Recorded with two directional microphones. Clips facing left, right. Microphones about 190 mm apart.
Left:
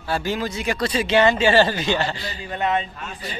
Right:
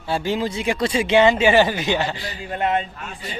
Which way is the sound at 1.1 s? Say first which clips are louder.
Right 2 dB; 10° right (ahead or behind).